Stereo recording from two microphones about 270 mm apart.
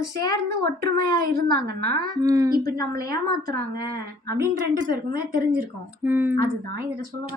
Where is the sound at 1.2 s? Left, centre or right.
Right.